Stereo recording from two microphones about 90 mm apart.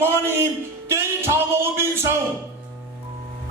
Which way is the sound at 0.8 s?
30° right (ahead or behind).